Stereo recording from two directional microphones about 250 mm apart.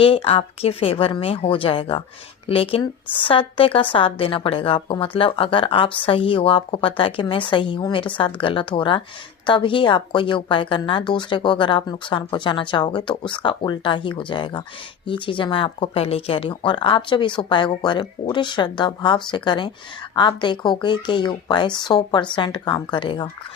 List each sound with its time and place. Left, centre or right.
0.0 s speech: left